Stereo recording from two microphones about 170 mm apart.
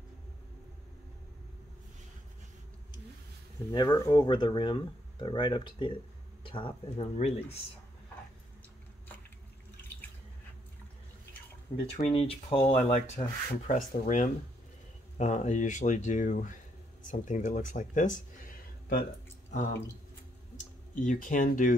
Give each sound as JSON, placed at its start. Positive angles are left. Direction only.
{"t": 3.7, "sound": "speech", "side_deg": 25}
{"t": 12.0, "sound": "speech", "side_deg": 35}
{"t": 20.5, "sound": "speech", "side_deg": 50}